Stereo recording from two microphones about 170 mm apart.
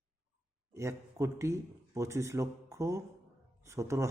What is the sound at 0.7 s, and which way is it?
A man's voice, 15° right (ahead or behind).